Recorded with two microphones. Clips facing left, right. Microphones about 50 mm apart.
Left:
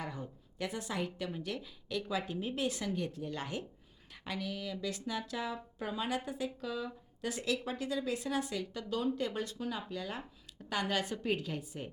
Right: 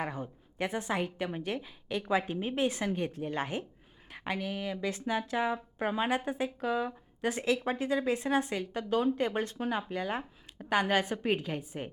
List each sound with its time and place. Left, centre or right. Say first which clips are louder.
0.0 s a woman's voice: right 6 dB; right